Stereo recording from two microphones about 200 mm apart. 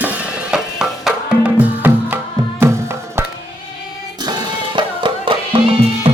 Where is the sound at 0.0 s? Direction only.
5° right (ahead or behind); by 6.1 s 25° right (ahead or behind).